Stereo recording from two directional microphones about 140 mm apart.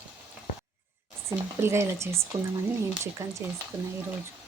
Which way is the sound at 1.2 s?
20° right (ahead or behind).